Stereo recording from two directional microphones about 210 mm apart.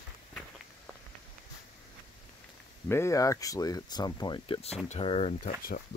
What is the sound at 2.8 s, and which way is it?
Speech, 10° left (ahead or behind).